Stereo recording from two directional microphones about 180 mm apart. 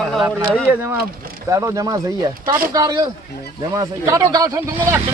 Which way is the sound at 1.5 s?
15° right (ahead or behind).